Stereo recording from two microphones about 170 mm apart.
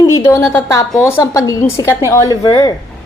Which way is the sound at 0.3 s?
15° left (ahead or behind).